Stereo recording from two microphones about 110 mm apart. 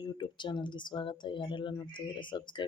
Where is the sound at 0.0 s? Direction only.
45° left (ahead or behind).